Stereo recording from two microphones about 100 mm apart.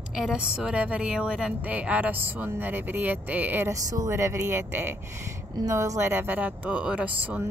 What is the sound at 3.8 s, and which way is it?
A woman's voice, 35° right (ahead or behind).